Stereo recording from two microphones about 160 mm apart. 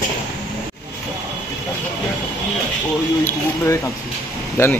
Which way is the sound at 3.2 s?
20° left (ahead or behind).